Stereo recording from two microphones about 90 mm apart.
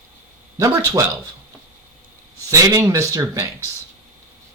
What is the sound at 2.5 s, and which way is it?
Speech, 40° right (ahead or behind).